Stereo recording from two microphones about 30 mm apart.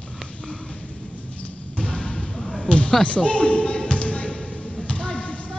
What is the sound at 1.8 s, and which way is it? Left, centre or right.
Basketball bounce, left.